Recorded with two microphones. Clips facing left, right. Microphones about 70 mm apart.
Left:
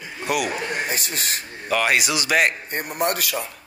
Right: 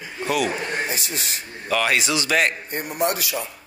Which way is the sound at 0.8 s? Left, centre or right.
Left.